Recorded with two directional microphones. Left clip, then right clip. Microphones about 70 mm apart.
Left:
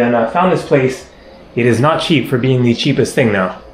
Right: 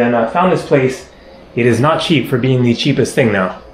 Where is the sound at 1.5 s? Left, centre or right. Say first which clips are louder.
Even; left.